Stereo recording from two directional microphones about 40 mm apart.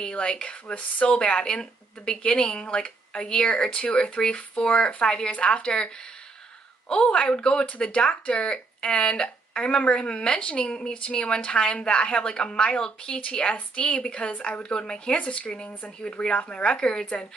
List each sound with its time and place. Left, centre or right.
0.0 s speech: left
6.9 s speech: left